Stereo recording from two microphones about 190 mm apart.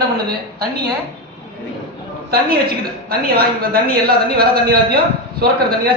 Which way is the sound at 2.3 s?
55° right (ahead or behind).